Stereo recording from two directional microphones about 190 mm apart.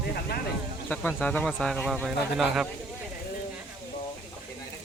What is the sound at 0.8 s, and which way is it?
Speech, 10° left (ahead or behind).